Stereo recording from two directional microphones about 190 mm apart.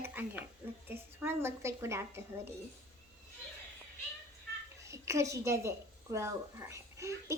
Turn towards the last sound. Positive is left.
turn(degrees=-15)  # may be behind; listen again after turning